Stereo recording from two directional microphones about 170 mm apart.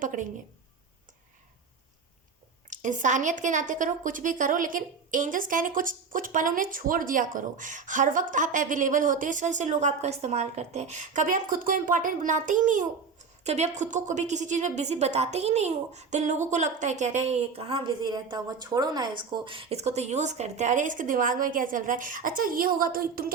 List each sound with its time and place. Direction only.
0.0 s a woman's voice: 50° right (ahead or behind)
2.6 s speech: 45° right (ahead or behind)